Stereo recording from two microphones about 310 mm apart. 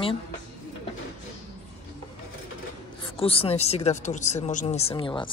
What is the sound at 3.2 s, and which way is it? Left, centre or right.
Speech, centre.